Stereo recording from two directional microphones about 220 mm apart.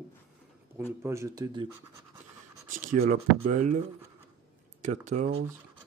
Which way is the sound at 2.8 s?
35° right (ahead or behind).